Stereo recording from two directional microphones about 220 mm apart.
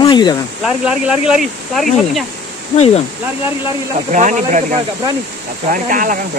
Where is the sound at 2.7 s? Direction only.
30° left (ahead or behind).